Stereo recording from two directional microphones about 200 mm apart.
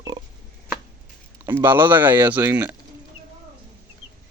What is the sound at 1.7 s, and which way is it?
Speech, 10° right (ahead or behind).